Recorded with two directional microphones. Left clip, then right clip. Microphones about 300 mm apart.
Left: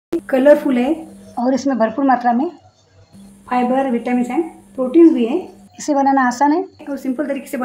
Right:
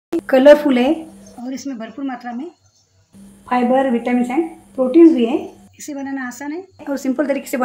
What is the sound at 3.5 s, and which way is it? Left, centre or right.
A woman's voice, centre.